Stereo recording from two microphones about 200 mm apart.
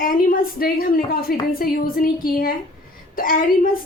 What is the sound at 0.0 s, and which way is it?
A woman's voice, 45° left (ahead or behind).